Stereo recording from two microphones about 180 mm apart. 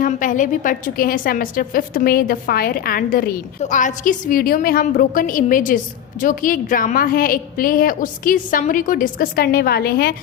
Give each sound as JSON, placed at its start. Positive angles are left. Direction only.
{"t": 0.0, "sound": "a woman's voice", "side_deg": 45}